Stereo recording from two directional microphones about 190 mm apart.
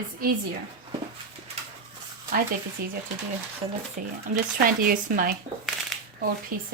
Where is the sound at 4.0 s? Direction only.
45° right (ahead or behind).